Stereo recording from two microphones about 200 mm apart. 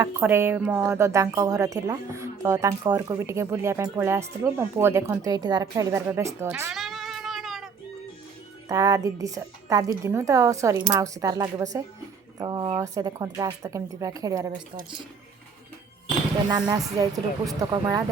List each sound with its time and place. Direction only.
0.0 s speech: 10° right (ahead or behind)
6.7 s a sound: centre (ahead or behind)
8.7 s speech: 15° right (ahead or behind)
17.0 s speech: 20° right (ahead or behind)